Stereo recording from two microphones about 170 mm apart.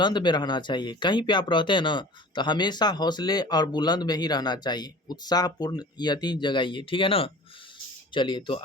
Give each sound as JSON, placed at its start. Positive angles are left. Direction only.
{"t": 0.0, "sound": "speech", "side_deg": 25}